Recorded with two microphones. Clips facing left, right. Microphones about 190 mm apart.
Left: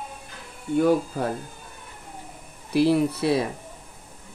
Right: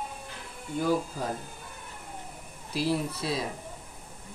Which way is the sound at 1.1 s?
60° left (ahead or behind).